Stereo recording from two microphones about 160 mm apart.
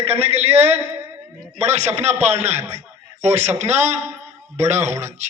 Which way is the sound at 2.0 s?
45° right (ahead or behind).